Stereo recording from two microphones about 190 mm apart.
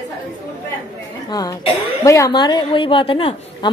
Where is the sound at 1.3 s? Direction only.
20° left (ahead or behind).